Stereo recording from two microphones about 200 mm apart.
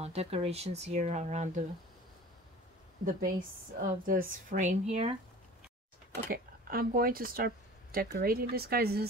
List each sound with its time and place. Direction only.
0.0 s a woman's voice: 30° right (ahead or behind)
3.2 s a woman's voice: 40° right (ahead or behind)
6.3 s speech: 45° right (ahead or behind)